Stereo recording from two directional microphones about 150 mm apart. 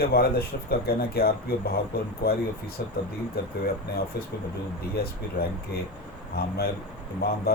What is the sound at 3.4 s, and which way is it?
Speech, 90° left.